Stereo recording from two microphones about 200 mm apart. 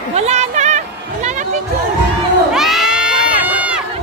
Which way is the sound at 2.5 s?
Centre (ahead or behind).